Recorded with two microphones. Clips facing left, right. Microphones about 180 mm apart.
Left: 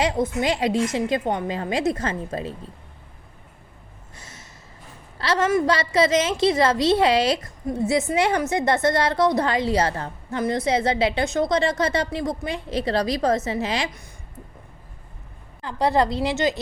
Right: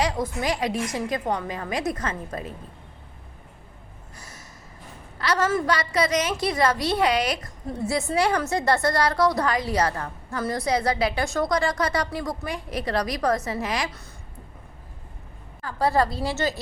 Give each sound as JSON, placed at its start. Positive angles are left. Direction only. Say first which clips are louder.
{"t": 0.0, "sound": "a woman's voice", "louder": "left 3 dB", "side_deg": 25}
{"t": 4.2, "sound": "snort", "louder": "even", "side_deg": 25}
{"t": 5.2, "sound": "a woman's voice", "louder": "left 3 dB", "side_deg": 25}
{"t": 15.6, "sound": "a woman's voice", "louder": "left 2 dB", "side_deg": 20}